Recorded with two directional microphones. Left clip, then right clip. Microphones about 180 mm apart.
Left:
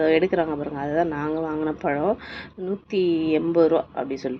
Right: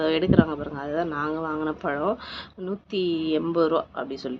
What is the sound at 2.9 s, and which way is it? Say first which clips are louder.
Speech: left 4 dB; 40° left (ahead or behind).